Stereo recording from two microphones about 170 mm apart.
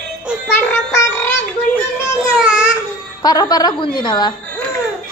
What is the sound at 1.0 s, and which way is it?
Child singing, 10° left (ahead or behind).